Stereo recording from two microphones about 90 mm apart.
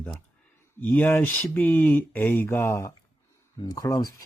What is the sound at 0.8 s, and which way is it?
Speech, 20° left (ahead or behind).